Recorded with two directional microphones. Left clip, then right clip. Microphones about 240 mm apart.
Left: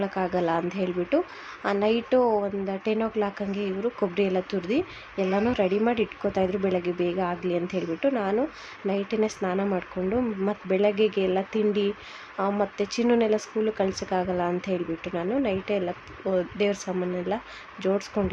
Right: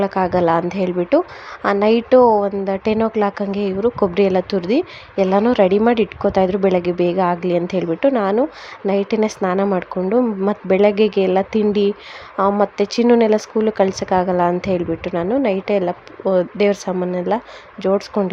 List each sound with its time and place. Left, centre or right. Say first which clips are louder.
0.0 s a woman's voice: right 10 dB; right